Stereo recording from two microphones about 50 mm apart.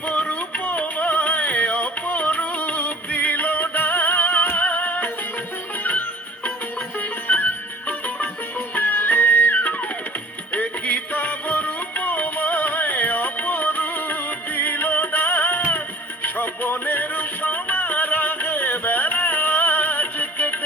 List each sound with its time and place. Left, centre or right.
0.0 s music: left
10.5 s music: left